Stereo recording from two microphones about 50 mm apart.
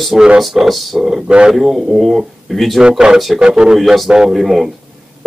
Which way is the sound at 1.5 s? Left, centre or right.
Centre.